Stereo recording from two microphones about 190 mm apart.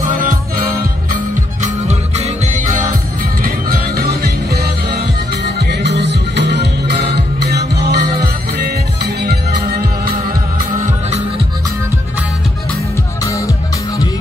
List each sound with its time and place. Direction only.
0.0 s music: 45° right (ahead or behind)
1.6 s music: 35° right (ahead or behind); by 10.1 s 55° right (ahead or behind)